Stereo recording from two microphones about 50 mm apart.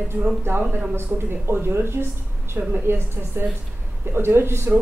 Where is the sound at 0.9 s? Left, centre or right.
Right.